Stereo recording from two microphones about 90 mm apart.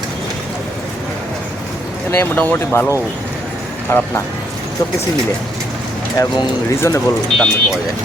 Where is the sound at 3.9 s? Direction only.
30° left (ahead or behind).